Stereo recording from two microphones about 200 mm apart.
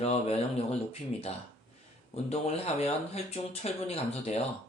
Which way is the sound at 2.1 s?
30° left (ahead or behind).